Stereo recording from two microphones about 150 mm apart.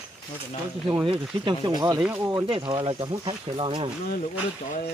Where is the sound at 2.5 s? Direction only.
35° right (ahead or behind).